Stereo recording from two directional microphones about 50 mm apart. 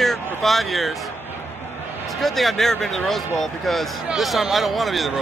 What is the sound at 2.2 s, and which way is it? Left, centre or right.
A man's voice, centre.